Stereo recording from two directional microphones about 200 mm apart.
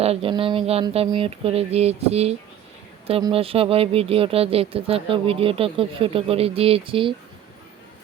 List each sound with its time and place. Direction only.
0.0 s speech: 30° right (ahead or behind)